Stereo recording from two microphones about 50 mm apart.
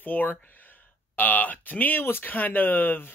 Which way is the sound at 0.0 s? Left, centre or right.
Left.